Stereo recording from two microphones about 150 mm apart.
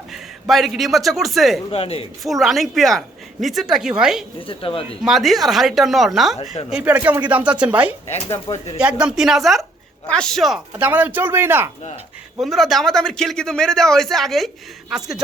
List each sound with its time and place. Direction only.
0.1 s a man's voice: centre (ahead or behind)
1.7 s speech: 40° left (ahead or behind)
2.2 s a man's voice: centre (ahead or behind)
4.4 s speech: 40° left (ahead or behind)
5.0 s a man's voice: centre (ahead or behind)
8.1 s speech: 45° left (ahead or behind)
8.8 s a man's voice: 5° right (ahead or behind)
12.4 s a man's voice: centre (ahead or behind)